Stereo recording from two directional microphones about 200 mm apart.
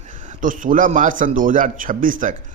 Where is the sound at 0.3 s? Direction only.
40° right (ahead or behind).